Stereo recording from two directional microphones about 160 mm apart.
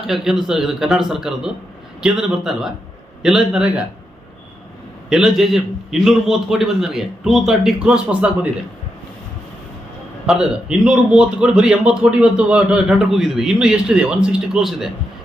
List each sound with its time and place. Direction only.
0.1 s a man's voice: centre (ahead or behind)
5.0 s a man's voice: 5° right (ahead or behind)
10.2 s a man's voice: 5° right (ahead or behind)